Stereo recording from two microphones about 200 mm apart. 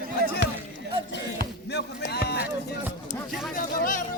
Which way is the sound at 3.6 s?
45° left (ahead or behind).